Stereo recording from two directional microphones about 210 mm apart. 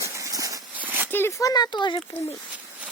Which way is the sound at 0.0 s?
15° right (ahead or behind).